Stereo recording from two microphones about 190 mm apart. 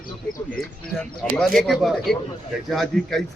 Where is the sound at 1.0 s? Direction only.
5° left (ahead or behind).